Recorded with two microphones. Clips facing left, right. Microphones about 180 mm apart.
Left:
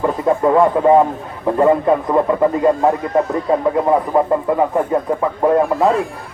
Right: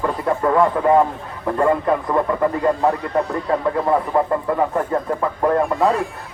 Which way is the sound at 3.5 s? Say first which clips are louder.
Left 4 dB; 20° left (ahead or behind).